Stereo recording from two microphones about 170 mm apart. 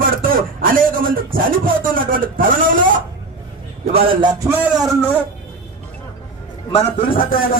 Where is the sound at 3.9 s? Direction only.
30° right (ahead or behind).